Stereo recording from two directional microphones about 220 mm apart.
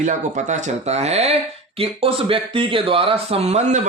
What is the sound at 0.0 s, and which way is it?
Speech, 35° right (ahead or behind).